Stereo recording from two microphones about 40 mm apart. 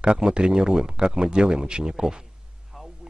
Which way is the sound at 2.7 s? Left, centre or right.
Centre.